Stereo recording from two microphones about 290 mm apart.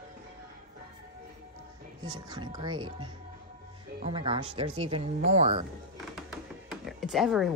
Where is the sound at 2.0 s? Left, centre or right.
Centre.